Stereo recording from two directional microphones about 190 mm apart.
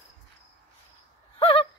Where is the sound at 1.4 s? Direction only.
25° left (ahead or behind).